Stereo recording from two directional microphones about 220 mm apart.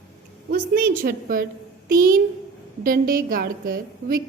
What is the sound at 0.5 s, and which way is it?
A woman's voice, 45° right (ahead or behind).